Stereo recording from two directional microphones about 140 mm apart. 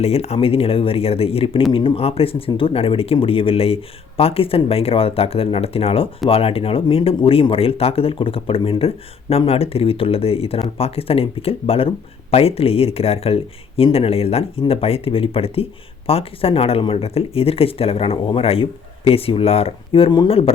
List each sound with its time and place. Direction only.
0.0 s speech: 45° left (ahead or behind)